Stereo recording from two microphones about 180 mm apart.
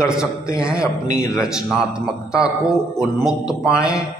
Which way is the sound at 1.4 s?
5° right (ahead or behind).